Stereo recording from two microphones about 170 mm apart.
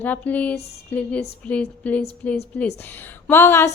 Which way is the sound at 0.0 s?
10° left (ahead or behind).